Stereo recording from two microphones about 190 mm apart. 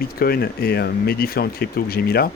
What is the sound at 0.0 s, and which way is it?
Speech, 50° left (ahead or behind).